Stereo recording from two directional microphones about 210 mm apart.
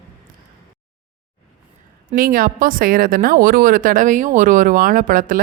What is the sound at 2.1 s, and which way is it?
A woman's voice, 45° right (ahead or behind).